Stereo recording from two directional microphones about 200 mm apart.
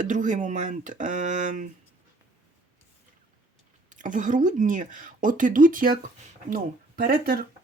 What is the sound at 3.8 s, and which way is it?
Speech, 40° right (ahead or behind).